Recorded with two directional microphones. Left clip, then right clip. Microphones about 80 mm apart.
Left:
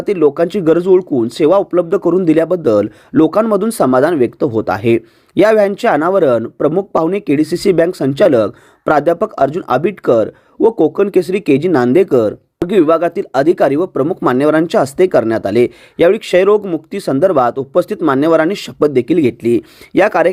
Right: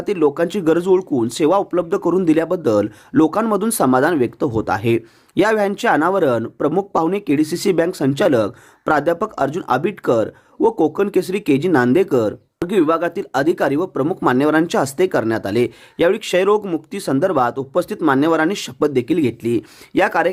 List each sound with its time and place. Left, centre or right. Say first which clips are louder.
0.0 s speech: left 5 dB; left